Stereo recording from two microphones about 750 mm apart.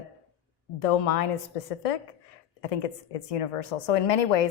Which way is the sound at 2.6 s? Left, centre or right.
Left.